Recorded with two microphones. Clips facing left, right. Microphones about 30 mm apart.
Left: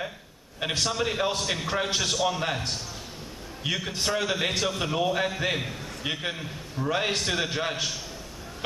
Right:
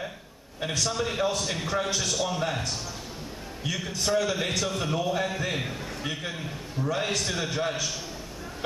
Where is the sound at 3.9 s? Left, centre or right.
Left.